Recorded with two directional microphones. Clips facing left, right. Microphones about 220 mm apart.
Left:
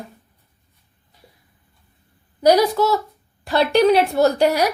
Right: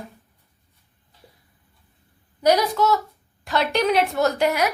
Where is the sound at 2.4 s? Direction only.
30° left (ahead or behind).